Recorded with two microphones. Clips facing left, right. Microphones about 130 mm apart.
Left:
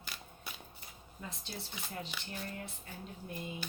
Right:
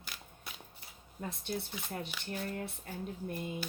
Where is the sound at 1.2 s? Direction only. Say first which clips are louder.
Right 7 dB; 55° right (ahead or behind).